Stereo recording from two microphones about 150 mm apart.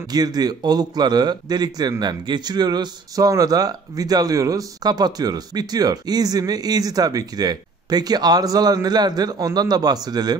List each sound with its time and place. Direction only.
0.1 s a man's voice: 25° right (ahead or behind)